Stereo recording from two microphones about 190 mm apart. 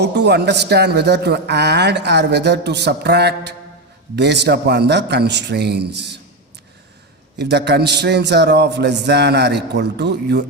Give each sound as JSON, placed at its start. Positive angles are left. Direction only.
{"t": 0.0, "sound": "speech", "side_deg": -65}
{"t": 7.3, "sound": "speech", "side_deg": -60}